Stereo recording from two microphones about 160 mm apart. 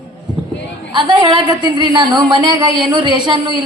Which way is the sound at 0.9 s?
30° right (ahead or behind).